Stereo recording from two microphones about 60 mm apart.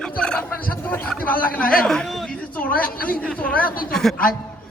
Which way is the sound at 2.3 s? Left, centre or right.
Left.